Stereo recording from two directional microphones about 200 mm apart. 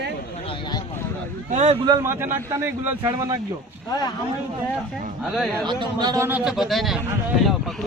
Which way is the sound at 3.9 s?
20° left (ahead or behind).